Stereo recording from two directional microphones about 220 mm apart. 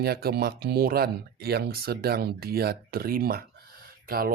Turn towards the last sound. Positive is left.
turn(degrees=-40)  # may be behind; listen again after turning